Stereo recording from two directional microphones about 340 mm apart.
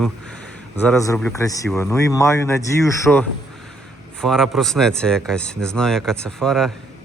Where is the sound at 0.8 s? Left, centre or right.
Centre.